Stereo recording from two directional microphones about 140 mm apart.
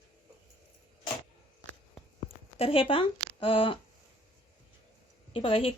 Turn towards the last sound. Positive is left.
turn(degrees=40)  # may be behind; listen again after turning